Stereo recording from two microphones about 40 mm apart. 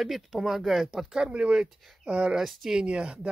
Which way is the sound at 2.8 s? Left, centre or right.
Right.